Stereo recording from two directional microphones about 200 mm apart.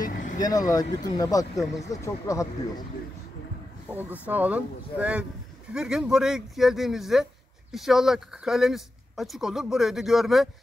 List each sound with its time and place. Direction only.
0.0 s vehicle: 40° left (ahead or behind)
0.4 s speech: 20° left (ahead or behind)
4.3 s speech: 5° right (ahead or behind)